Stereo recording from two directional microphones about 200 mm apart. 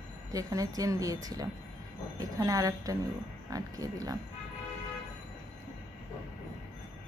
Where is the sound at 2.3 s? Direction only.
15° right (ahead or behind).